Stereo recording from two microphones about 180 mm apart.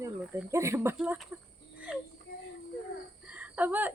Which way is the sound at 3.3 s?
10° right (ahead or behind).